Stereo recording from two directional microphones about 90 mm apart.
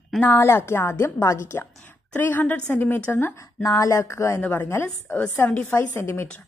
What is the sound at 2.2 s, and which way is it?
A woman's voice, 20° left (ahead or behind).